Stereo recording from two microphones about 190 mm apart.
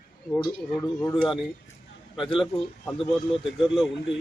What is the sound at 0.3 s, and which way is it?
Speech, 10° left (ahead or behind).